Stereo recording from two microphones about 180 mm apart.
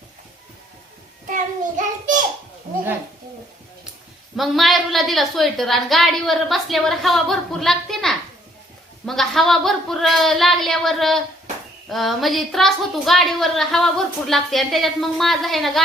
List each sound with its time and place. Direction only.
1.3 s a child's voice: 45° right (ahead or behind)
4.4 s a woman's voice: centre (ahead or behind)